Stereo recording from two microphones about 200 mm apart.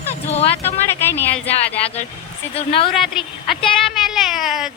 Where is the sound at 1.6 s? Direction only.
30° left (ahead or behind).